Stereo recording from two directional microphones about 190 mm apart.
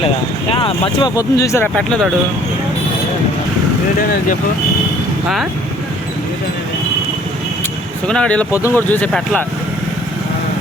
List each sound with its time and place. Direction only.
0.5 s speech: 25° left (ahead or behind); by 2.0 s 5° left (ahead or behind)
8.0 s speech: 5° left (ahead or behind)